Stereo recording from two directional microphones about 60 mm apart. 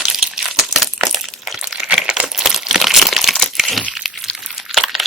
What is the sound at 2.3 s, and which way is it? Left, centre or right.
Crumpling, centre.